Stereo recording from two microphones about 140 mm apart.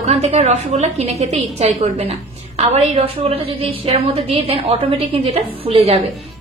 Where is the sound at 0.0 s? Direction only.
50° right (ahead or behind).